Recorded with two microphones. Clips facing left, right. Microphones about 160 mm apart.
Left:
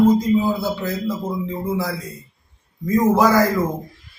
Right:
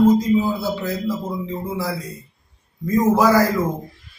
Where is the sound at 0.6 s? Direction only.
Centre (ahead or behind).